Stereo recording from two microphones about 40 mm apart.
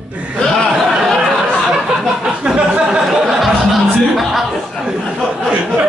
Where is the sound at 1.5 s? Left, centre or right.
Centre.